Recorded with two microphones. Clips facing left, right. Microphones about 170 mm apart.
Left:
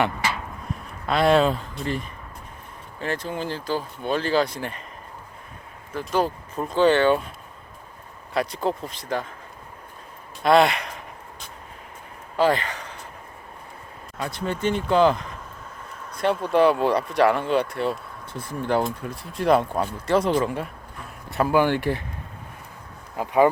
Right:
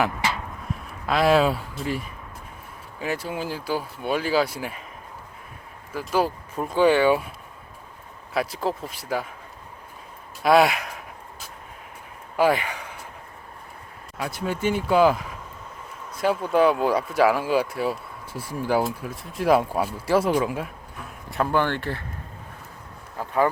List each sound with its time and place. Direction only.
0.7 s speech: centre (ahead or behind)
5.9 s speech: 10° right (ahead or behind)
8.3 s speech: 5° right (ahead or behind)
10.4 s a sound: 5° right (ahead or behind)
14.2 s speech: 5° right (ahead or behind); by 22.0 s 15° left (ahead or behind)
23.1 s speech: 15° left (ahead or behind)